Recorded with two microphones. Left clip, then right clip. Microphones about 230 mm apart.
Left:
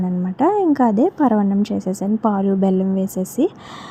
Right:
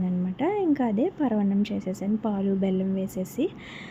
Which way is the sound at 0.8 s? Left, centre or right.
Left.